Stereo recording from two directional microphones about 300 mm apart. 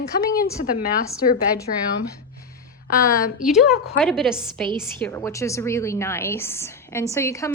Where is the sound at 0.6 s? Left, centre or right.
Left.